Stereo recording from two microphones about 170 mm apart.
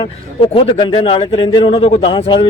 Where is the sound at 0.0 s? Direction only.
30° left (ahead or behind).